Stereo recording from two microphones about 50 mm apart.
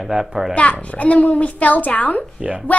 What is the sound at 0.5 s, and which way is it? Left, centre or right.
A child's voice, left.